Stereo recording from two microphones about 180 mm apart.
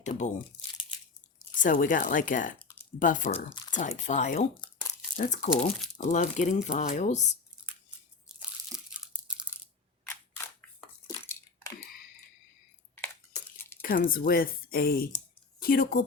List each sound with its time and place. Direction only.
0.0 s speech: 40° left (ahead or behind)
1.5 s speech: 45° left (ahead or behind)
8.3 s crunch: centre (ahead or behind)
8.9 s tearing: 5° right (ahead or behind)
10.1 s crushing: 10° left (ahead or behind)
13.0 s a sound: 10° left (ahead or behind)
13.8 s speech: 50° left (ahead or behind)